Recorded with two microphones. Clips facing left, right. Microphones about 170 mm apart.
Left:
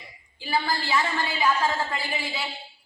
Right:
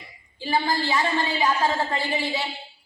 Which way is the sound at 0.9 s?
35° right (ahead or behind).